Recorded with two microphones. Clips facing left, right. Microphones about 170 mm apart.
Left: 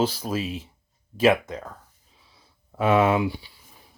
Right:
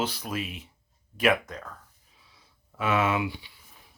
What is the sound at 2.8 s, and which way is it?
Speech, 35° left (ahead or behind).